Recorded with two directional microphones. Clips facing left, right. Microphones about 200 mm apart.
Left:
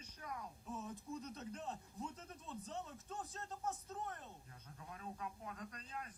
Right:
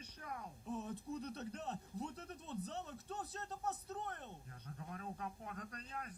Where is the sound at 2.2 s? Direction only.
65° right (ahead or behind).